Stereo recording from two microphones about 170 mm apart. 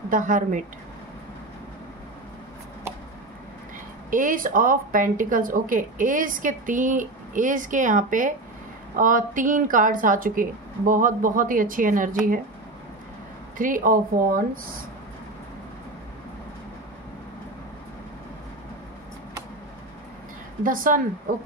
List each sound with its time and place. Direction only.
0.1 s speech: 50° right (ahead or behind)
4.1 s speech: 50° right (ahead or behind)
13.6 s speech: 55° right (ahead or behind)
20.6 s speech: 55° right (ahead or behind)